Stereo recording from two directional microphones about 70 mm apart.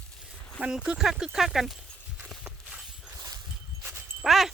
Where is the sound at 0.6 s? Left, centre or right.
Centre.